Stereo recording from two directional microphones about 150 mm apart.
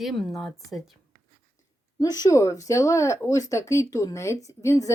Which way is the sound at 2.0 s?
25° left (ahead or behind).